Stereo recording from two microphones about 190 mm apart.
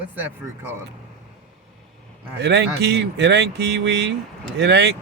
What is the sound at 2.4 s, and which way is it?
Speech, 65° right (ahead or behind).